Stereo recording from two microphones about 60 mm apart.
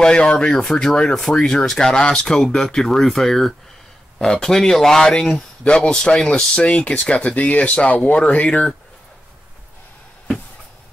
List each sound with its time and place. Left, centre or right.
0.0 s speech: centre